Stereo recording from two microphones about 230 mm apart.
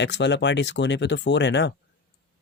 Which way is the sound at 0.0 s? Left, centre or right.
Left.